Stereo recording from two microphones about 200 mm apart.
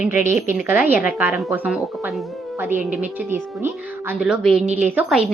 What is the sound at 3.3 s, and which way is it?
Speech, 10° right (ahead or behind).